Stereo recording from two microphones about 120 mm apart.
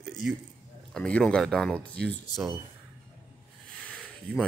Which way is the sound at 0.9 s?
5° left (ahead or behind).